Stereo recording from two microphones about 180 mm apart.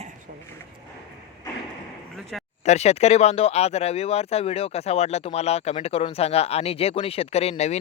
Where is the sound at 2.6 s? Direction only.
35° left (ahead or behind).